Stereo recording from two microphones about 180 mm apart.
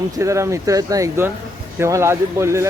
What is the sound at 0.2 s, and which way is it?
Speech, 15° right (ahead or behind).